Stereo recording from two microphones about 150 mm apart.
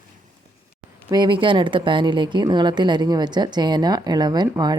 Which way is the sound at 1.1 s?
30° right (ahead or behind).